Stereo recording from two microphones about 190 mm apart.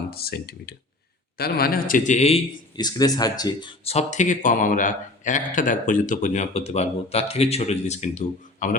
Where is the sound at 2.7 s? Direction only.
20° left (ahead or behind).